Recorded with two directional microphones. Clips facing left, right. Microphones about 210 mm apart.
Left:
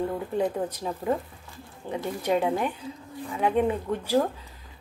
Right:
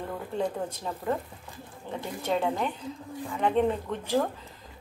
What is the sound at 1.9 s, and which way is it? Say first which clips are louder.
Speech: left 4 dB; 10° left (ahead or behind).